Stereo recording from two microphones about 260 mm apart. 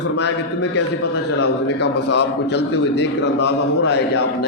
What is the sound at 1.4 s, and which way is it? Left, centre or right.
A man's voice, left.